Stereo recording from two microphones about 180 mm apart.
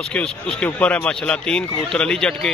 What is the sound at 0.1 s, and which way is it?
A man's voice, 5° left (ahead or behind).